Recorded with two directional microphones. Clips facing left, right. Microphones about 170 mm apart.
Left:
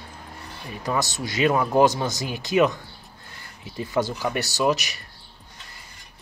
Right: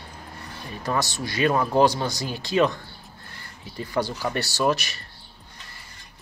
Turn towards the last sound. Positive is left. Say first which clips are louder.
# left 1 dB
turn(degrees=15)  # may be behind; listen again after turning